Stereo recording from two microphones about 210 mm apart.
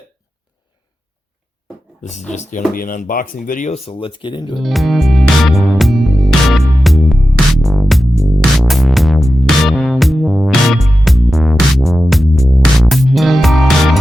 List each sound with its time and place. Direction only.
2.0 s speech: 35° left (ahead or behind)
3.8 s speech: 25° left (ahead or behind)
4.6 s music: centre (ahead or behind)